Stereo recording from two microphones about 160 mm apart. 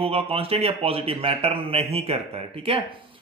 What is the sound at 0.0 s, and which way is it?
A man's voice, 35° right (ahead or behind).